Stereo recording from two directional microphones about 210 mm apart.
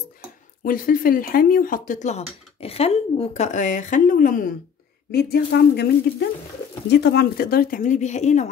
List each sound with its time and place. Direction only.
0.7 s a woman's voice: 40° left (ahead or behind)